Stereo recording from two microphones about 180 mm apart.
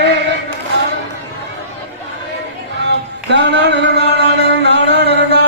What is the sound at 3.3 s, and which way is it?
Music, 75° right (ahead or behind).